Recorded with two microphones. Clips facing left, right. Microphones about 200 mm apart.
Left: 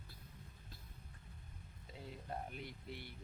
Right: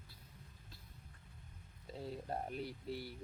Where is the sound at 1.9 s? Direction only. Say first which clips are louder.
Right 5 dB; 40° right (ahead or behind).